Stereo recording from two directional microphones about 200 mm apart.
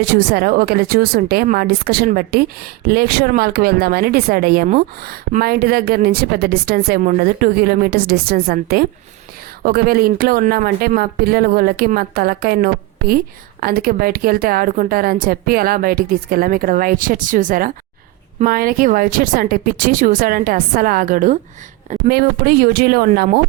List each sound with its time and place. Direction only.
0.0 s a woman's voice: 45° right (ahead or behind)